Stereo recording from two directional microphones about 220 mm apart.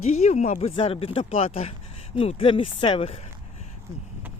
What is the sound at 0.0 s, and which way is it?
Speech, 30° left (ahead or behind).